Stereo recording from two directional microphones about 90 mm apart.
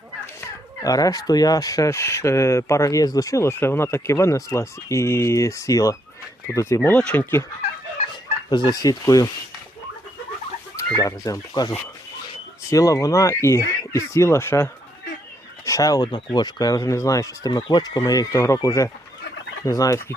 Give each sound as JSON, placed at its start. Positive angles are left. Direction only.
{"t": 0.8, "sound": "speech", "side_deg": 40}
{"t": 3.6, "sound": "speech", "side_deg": 25}
{"t": 7.0, "sound": "speech", "side_deg": 15}
{"t": 8.4, "sound": "speech", "side_deg": 50}
{"t": 10.9, "sound": "speech", "side_deg": 40}
{"t": 12.7, "sound": "speech", "side_deg": 40}
{"t": 16.1, "sound": "speech", "side_deg": 55}
{"t": 18.3, "sound": "speech", "side_deg": 30}